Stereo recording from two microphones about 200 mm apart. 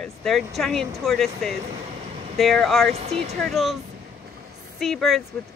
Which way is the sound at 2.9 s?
30° right (ahead or behind).